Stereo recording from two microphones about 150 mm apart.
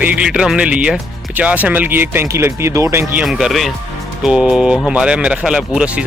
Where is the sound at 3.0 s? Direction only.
Centre (ahead or behind).